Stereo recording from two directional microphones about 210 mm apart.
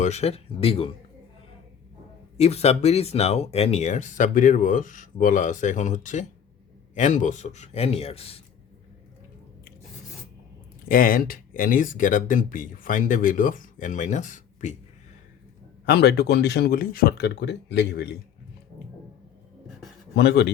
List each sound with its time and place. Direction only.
0.0 s speech: 30° left (ahead or behind)
2.4 s speech: 30° left (ahead or behind)
10.8 s speech: 40° left (ahead or behind)
15.9 s speech: 50° left (ahead or behind)
20.1 s speech: 50° left (ahead or behind)